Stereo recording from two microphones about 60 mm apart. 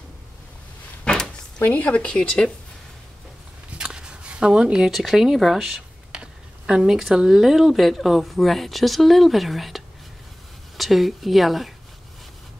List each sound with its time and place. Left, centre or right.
1.0 s a sound: centre
1.6 s speech: left
3.7 s a woman's voice: centre